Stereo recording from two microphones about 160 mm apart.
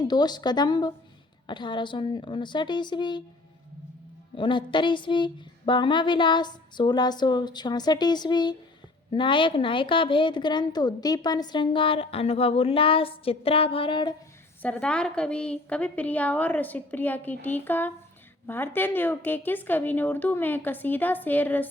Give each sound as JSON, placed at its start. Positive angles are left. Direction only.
{"t": 0.0, "sound": "speech", "side_deg": 25}
{"t": 4.4, "sound": "a woman's voice", "side_deg": 30}
{"t": 14.6, "sound": "a woman's voice", "side_deg": 10}